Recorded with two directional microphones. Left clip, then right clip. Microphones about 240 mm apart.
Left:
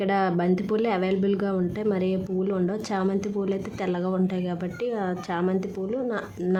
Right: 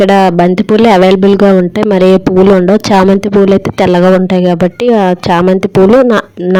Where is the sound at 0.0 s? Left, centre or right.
Right.